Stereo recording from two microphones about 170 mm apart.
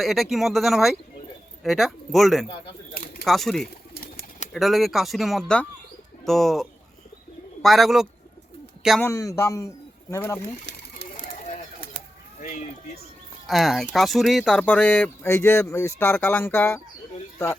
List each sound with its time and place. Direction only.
0.0 s speech: centre (ahead or behind)
9.0 s speech: 15° left (ahead or behind)
13.5 s speech: centre (ahead or behind)